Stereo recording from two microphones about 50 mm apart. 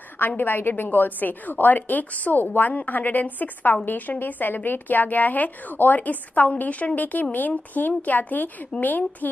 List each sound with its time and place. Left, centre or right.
0.4 s a woman's voice: left